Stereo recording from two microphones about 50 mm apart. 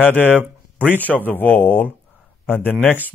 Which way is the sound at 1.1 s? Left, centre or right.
Left.